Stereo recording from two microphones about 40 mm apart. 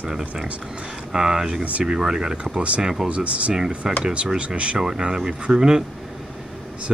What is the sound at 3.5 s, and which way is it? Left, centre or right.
Speech, centre.